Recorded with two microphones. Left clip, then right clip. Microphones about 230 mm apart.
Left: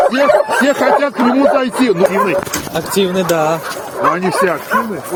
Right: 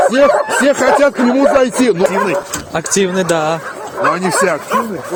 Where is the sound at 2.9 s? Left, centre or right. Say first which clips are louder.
Even; right.